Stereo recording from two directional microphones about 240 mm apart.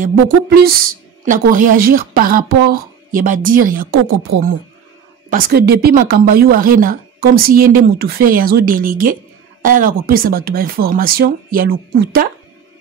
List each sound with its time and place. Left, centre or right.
0.0 s speech: right
5.3 s speech: right